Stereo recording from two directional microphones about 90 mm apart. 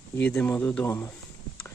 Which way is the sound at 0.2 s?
15° left (ahead or behind).